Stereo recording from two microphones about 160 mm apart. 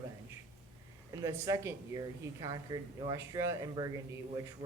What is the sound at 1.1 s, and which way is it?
Speech, 20° right (ahead or behind).